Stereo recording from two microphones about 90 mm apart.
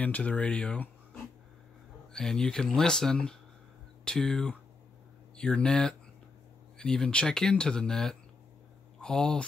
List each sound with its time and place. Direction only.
0.0 s speech: 15° left (ahead or behind)